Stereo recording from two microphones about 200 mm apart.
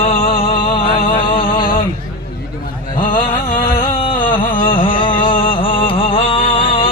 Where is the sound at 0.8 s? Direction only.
40° left (ahead or behind).